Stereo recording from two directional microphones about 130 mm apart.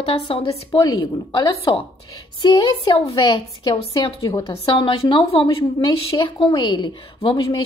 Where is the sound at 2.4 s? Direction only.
35° left (ahead or behind).